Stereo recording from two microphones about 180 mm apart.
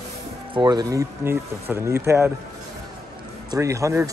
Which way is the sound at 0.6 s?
25° right (ahead or behind).